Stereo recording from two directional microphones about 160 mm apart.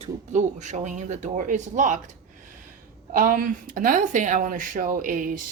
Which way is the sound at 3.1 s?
60° right (ahead or behind).